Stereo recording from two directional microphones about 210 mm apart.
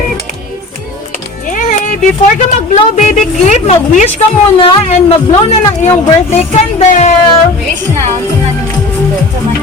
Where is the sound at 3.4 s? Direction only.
35° left (ahead or behind).